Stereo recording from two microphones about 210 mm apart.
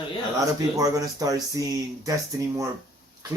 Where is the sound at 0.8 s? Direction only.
15° right (ahead or behind).